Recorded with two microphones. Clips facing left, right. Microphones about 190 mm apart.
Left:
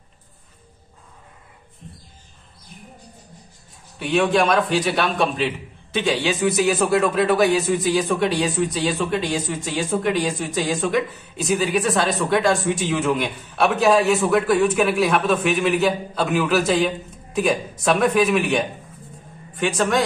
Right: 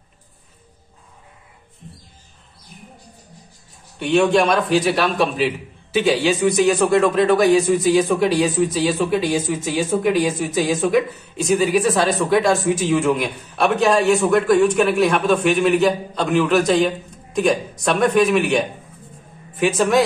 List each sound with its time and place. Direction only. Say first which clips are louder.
4.0 s a man's voice: right 3 dB; centre (ahead or behind)